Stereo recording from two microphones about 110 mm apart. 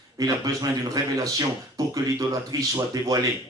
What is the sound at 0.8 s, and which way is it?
A man's voice, 30° right (ahead or behind).